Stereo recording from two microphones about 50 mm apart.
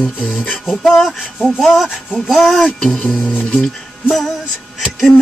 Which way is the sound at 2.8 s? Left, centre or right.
Centre.